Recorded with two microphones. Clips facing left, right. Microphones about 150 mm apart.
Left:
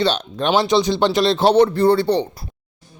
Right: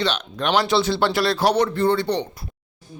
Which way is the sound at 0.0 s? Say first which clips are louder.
Left 4 dB; 30° left (ahead or behind).